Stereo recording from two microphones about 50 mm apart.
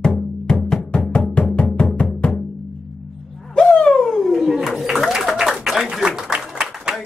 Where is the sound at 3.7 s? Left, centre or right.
Centre.